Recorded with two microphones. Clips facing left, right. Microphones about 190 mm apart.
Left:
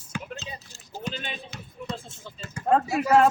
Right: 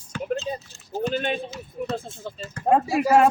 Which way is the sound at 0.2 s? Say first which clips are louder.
Right 11 dB; 45° right (ahead or behind).